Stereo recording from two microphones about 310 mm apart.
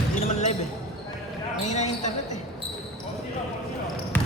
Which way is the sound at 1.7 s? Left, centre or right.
Left.